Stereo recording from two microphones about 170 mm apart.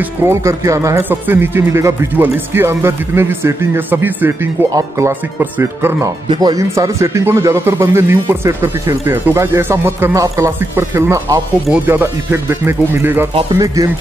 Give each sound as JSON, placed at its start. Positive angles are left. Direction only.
{"t": 0.2, "sound": "speech", "side_deg": -15}
{"t": 13.3, "sound": "speech", "side_deg": -35}